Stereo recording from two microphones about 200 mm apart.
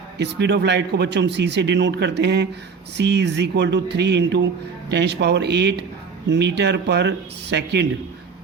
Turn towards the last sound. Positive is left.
turn(degrees=-55)  # may be behind; listen again after turning